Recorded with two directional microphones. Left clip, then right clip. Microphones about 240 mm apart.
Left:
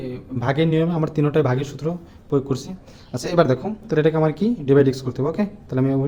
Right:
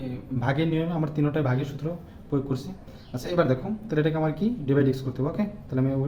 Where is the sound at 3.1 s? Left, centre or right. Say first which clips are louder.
Left 6 dB; left.